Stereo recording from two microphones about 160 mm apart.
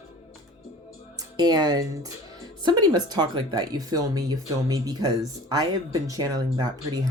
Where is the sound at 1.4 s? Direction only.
25° right (ahead or behind).